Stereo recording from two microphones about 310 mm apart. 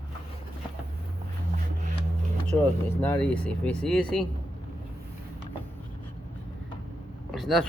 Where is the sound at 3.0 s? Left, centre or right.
Centre.